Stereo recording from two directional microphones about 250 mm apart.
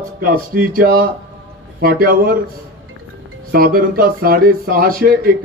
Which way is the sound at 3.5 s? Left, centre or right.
Right.